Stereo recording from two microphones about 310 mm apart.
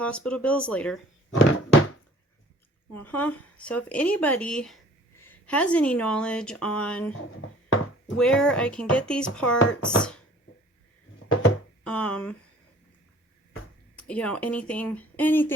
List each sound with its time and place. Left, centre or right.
0.0 s a woman's voice: centre
1.4 s a sound: left
3.0 s a woman's voice: centre
8.2 s a woman's voice: centre
9.6 s speech: left
11.2 s a sound: left
11.8 s speech: centre
13.9 s a woman's voice: centre